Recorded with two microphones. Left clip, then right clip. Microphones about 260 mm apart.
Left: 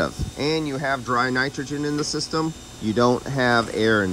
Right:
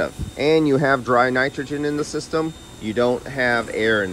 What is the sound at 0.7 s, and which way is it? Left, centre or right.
Speech, right.